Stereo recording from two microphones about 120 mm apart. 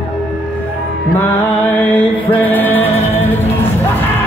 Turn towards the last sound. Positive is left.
turn(degrees=60)  # may be behind; listen again after turning